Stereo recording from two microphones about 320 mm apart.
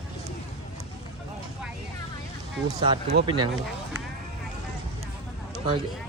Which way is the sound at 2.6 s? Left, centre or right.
Centre.